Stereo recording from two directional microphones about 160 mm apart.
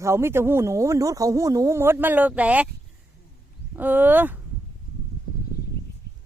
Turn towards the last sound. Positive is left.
turn(degrees=-10)  # may be behind; listen again after turning